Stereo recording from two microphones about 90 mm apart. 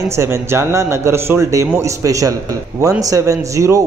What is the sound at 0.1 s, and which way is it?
A man's voice, 30° right (ahead or behind).